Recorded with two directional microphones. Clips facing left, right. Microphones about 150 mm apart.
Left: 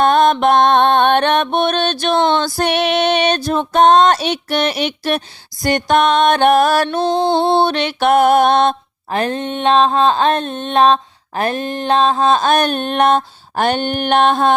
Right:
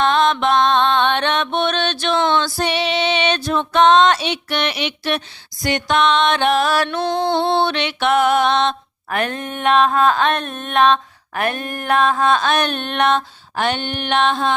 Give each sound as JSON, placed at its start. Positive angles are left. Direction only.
{"t": 0.0, "sound": "female singing", "side_deg": 50}
{"t": 7.2, "sound": "music", "side_deg": 15}
{"t": 7.6, "sound": "female singing", "side_deg": 40}
{"t": 9.0, "sound": "a sound", "side_deg": 30}